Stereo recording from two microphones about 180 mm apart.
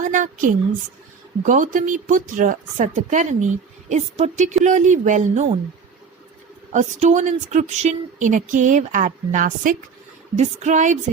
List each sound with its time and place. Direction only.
0.0 s speech: 45° right (ahead or behind)
6.7 s a woman's voice: 40° right (ahead or behind)